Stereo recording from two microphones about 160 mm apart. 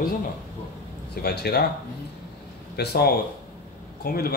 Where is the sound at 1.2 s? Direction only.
90° left.